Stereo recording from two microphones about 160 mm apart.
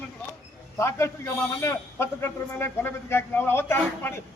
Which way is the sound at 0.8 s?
15° left (ahead or behind).